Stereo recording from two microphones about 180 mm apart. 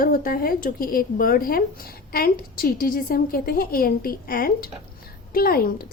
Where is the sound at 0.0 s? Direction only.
50° left (ahead or behind).